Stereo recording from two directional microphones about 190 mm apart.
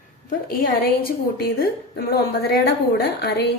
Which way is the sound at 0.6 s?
50° left (ahead or behind).